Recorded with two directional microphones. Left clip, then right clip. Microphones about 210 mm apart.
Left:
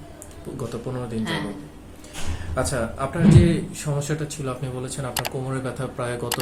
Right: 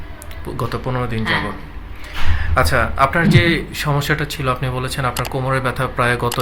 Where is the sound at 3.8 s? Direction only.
35° right (ahead or behind).